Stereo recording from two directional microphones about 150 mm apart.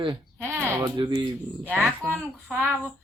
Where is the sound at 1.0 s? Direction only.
35° right (ahead or behind).